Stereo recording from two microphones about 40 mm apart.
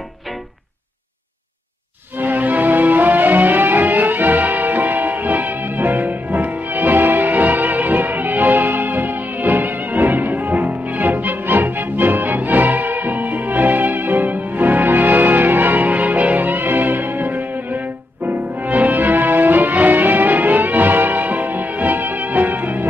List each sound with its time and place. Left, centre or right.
2.1 s music: right